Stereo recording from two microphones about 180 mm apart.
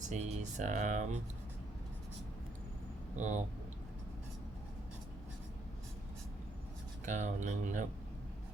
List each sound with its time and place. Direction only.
0.0 s speech: 40° right (ahead or behind)
3.2 s speech: 40° right (ahead or behind)
7.0 s speech: 40° right (ahead or behind)